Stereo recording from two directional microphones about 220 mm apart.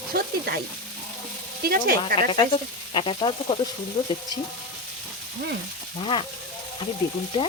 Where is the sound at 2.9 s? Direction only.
25° left (ahead or behind).